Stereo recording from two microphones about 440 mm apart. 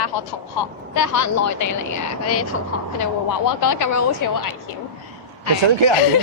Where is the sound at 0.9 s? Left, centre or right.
Left.